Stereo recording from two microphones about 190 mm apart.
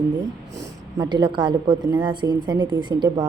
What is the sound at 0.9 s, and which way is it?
A woman's voice, 25° right (ahead or behind).